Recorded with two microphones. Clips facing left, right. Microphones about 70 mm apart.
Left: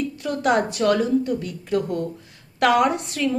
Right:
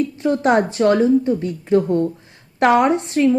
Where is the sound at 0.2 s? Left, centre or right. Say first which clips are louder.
Right 4 dB; right.